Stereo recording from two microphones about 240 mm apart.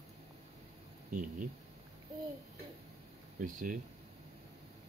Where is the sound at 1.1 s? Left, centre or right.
Right.